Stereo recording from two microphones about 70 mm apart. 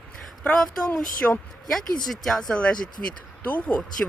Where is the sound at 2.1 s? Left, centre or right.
Centre.